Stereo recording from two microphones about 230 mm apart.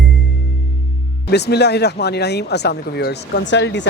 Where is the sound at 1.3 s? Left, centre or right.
Left.